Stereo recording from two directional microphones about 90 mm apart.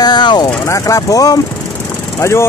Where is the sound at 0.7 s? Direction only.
35° left (ahead or behind).